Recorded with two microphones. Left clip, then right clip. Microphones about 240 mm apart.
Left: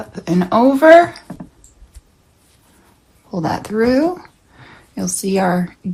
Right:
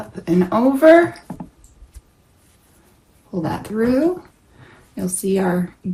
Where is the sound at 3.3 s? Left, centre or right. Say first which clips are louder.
Left 4 dB; left.